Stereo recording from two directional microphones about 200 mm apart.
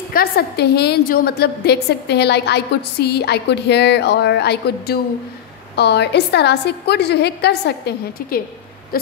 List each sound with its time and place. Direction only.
0.1 s a woman's voice: 50° left (ahead or behind)
8.9 s owl: 50° left (ahead or behind)